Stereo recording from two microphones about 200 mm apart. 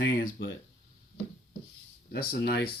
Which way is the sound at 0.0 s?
60° left (ahead or behind).